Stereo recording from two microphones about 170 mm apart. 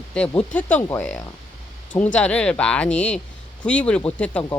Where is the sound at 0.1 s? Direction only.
5° left (ahead or behind).